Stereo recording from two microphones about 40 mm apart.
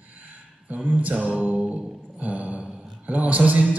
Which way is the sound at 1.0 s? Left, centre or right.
Right.